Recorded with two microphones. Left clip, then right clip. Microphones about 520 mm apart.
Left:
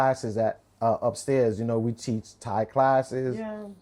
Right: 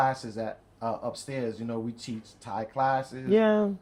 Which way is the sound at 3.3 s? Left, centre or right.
Right.